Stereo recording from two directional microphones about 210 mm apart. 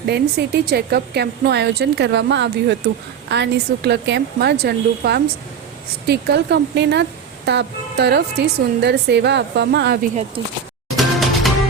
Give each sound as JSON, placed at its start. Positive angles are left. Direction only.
{"t": 0.0, "sound": "a woman's voice", "side_deg": -50}
{"t": 10.9, "sound": "music", "side_deg": 0}